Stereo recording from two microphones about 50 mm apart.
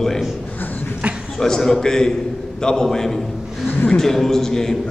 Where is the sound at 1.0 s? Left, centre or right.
Right.